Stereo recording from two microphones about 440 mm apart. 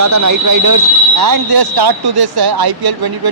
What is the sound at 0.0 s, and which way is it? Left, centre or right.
Speech, right.